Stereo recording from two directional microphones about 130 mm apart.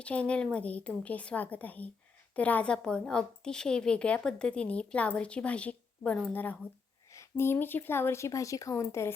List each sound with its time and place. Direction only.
0.0 s a woman's voice: 10° left (ahead or behind)